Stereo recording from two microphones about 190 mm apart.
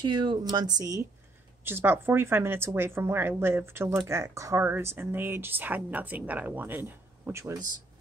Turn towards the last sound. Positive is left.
turn(degrees=-15)  # may be behind; listen again after turning